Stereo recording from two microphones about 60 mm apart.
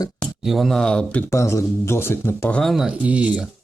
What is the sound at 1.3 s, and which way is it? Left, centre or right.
Speech, left.